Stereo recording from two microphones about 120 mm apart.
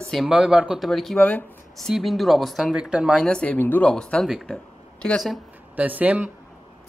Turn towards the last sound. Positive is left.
turn(degrees=-15)  # may be behind; listen again after turning